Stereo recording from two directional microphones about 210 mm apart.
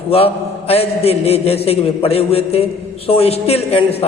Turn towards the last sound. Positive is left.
turn(degrees=30)  # may be behind; listen again after turning